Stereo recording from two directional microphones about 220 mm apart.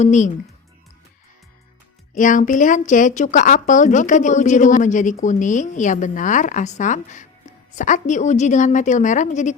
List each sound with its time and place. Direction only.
0.0 s speech: 35° left (ahead or behind)
2.1 s speech: 35° left (ahead or behind)